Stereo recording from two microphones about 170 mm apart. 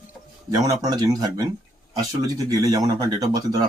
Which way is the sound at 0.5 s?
20° right (ahead or behind).